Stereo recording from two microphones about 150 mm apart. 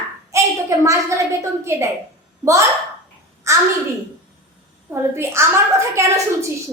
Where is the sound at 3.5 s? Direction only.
20° right (ahead or behind).